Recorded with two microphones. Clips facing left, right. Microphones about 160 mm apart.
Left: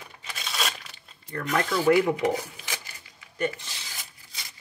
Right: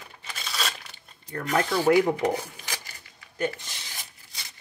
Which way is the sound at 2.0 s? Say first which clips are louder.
Right 1 dB; 40° right (ahead or behind).